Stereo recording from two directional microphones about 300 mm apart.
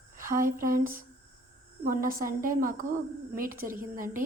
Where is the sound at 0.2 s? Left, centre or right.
Right.